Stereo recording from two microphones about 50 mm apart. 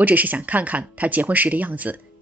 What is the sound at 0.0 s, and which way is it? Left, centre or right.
Speech, right.